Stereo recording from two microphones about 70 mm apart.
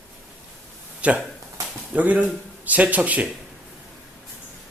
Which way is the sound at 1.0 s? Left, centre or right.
Centre.